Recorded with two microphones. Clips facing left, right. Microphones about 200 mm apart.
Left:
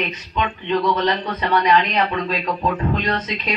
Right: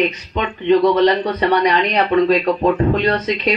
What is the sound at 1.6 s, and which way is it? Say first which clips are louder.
A man's voice: right 2 dB; 45° right (ahead or behind).